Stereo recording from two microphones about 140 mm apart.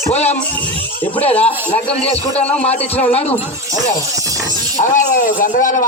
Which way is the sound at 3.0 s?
45° left (ahead or behind).